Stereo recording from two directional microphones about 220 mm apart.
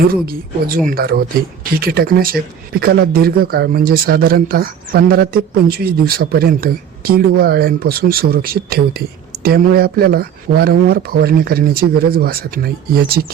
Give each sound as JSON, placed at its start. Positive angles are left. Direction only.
{"t": 0.3, "sound": "speech", "side_deg": -45}